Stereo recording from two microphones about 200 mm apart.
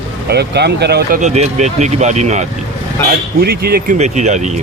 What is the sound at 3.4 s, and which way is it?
Speech, 50° right (ahead or behind).